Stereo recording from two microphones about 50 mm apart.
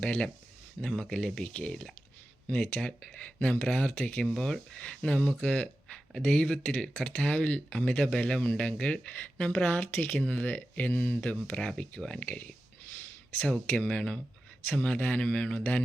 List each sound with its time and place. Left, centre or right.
0.0 s speech: centre
1.5 s speech: left
2.5 s speech: left
3.1 s speech: left
4.3 s speech: centre
4.8 s speech: left
9.2 s speech: left
10.2 s speech: left
10.4 s speech: left
11.8 s speech: left